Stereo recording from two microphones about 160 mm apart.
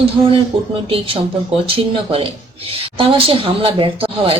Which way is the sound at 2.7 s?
35° right (ahead or behind).